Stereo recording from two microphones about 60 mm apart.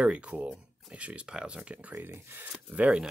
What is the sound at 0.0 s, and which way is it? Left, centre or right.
Speech, right.